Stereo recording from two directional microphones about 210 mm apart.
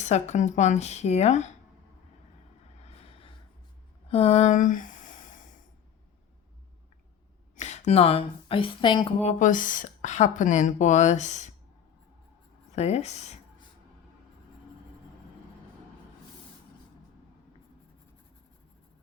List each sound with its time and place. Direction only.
0.0 s speech: 35° left (ahead or behind)
2.8 s vehicle: 30° left (ahead or behind)
4.1 s a sound: 30° left (ahead or behind)
7.5 s speech: 35° left (ahead or behind)
9.4 s speech: 40° left (ahead or behind)
12.7 s speech: 30° left (ahead or behind)